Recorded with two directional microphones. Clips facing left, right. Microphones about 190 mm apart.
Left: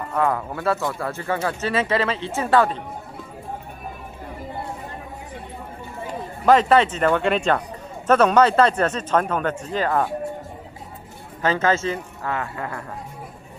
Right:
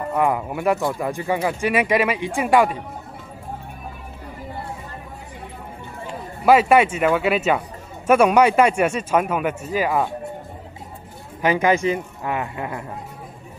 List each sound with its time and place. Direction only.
0.1 s speech: 15° right (ahead or behind)
6.4 s speech: 10° right (ahead or behind)
11.4 s speech: 15° right (ahead or behind)